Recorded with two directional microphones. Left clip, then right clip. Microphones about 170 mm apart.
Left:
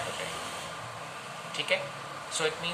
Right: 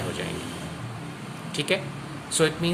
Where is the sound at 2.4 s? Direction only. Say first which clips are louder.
Right 7 dB; 70° right (ahead or behind).